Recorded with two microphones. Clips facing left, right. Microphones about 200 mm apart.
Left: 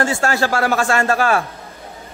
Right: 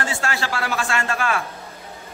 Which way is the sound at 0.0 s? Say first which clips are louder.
Left 8 dB; 45° left (ahead or behind).